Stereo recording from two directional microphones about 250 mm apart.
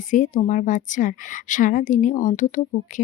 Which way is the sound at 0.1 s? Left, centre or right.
Left.